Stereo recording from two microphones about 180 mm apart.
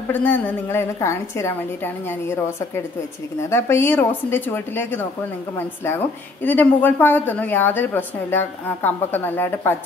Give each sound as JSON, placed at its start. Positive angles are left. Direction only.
{"t": 0.1, "sound": "a woman's voice", "side_deg": 10}